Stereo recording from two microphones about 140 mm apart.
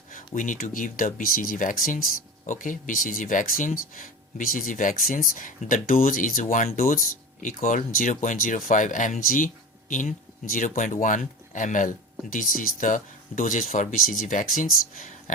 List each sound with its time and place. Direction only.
0.3 s speech: 70° left (ahead or behind)